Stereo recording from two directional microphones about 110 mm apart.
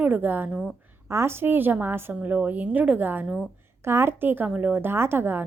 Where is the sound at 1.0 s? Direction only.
25° right (ahead or behind).